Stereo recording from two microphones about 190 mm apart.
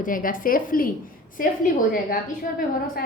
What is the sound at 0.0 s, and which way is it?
Speech, 45° left (ahead or behind).